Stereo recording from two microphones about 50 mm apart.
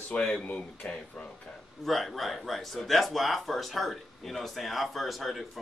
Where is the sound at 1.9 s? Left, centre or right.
Centre.